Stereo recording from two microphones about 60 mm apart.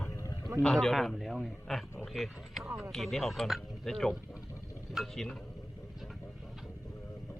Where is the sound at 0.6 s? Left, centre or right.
Centre.